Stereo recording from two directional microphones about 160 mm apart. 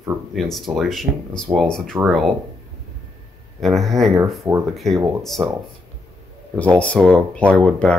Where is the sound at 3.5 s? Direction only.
Centre (ahead or behind).